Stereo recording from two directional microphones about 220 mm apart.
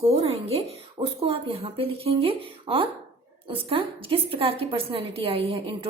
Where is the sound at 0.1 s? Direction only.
25° right (ahead or behind).